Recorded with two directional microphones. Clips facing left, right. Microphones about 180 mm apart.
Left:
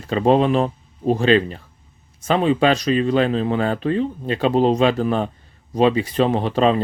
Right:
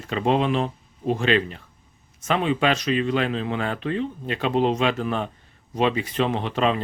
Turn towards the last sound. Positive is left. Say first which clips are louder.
# left 5 dB
turn(degrees=35)  # may be behind; listen again after turning